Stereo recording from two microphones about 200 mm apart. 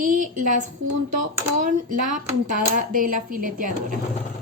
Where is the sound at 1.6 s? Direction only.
40° right (ahead or behind).